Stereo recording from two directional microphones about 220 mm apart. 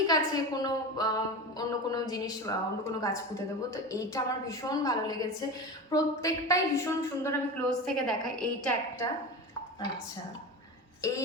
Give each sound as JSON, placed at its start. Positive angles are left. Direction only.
{"t": 0.1, "sound": "a woman's voice", "side_deg": 15}
{"t": 11.0, "sound": "a woman's voice", "side_deg": 15}